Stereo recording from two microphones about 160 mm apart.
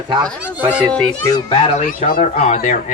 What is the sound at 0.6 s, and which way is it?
Speech, 10° right (ahead or behind).